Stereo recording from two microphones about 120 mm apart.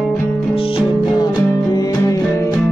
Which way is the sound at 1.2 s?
35° left (ahead or behind).